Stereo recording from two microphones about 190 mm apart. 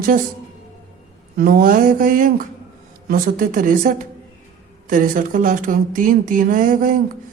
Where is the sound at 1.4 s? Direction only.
50° right (ahead or behind).